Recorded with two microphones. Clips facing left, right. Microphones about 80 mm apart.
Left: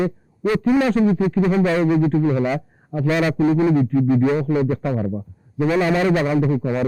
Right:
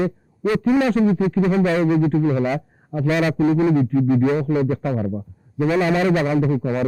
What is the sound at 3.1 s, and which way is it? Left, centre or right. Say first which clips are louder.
Speech: even; centre.